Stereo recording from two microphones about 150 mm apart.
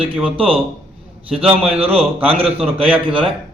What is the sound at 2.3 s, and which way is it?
Speech, 40° right (ahead or behind).